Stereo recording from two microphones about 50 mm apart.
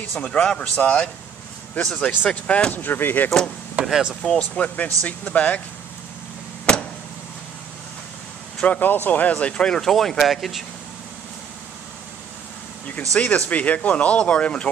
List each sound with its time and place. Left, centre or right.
0.2 s speech: left
2.7 s speech: left
3.8 s speech: right
4.2 s speech: centre
4.7 s speech: left
6.7 s vehicle: centre
8.6 s speech: left; by 10.6 s centre
13.2 s speech: left